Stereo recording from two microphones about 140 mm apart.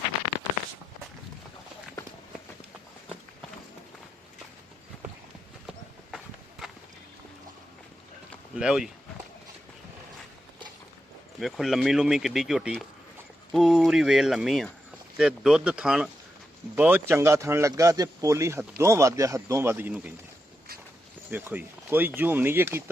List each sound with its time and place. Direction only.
5.6 s horse: centre (ahead or behind)
8.5 s speech: 5° right (ahead or behind)
11.3 s speech: centre (ahead or behind)
21.2 s speech: 10° right (ahead or behind)